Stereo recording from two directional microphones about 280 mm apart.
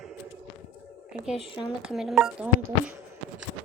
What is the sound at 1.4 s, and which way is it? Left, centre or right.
Speech, centre.